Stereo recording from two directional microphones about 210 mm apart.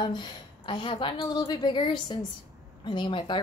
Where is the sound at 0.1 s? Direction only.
20° left (ahead or behind).